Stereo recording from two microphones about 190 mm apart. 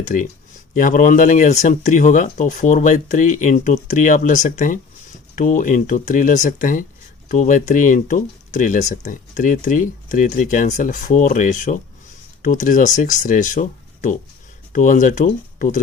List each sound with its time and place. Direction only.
0.0 s speech: 45° left (ahead or behind)